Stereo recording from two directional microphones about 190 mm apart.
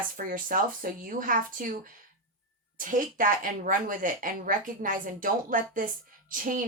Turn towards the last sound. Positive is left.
turn(degrees=-45)  # may be behind; listen again after turning